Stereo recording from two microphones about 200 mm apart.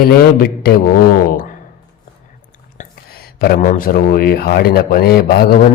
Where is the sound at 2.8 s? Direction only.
50° left (ahead or behind).